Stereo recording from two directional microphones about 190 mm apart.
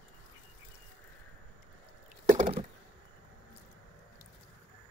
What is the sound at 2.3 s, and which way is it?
Computer keyboard, 35° right (ahead or behind).